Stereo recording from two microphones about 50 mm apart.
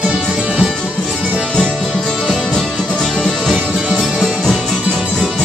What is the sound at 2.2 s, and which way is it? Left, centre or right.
Music, centre.